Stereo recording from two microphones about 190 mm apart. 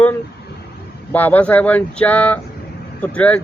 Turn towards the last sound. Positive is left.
turn(degrees=5)  # may be behind; listen again after turning